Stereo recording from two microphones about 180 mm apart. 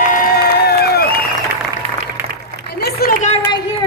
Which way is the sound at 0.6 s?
60° left (ahead or behind).